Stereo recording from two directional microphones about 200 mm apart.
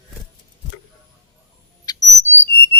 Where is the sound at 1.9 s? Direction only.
20° left (ahead or behind).